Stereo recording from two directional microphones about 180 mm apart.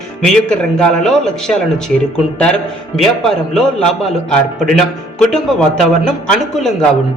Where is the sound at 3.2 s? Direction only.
Centre (ahead or behind).